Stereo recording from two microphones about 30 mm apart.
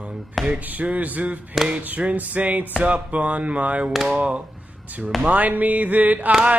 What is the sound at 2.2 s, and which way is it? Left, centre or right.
Music, right.